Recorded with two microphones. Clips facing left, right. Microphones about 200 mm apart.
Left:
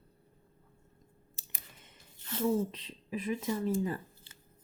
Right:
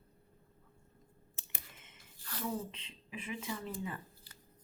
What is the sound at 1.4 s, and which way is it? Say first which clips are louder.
Clicking: left 1 dB; 35° left (ahead or behind).